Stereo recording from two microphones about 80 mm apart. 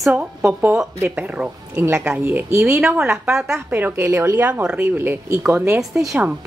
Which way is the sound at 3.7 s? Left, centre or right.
Right.